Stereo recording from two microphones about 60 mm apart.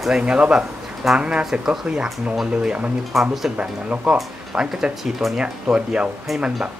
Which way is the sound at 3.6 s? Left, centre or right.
Right.